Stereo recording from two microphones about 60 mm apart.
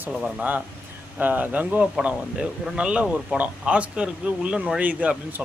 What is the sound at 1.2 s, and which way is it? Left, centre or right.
Speech, right.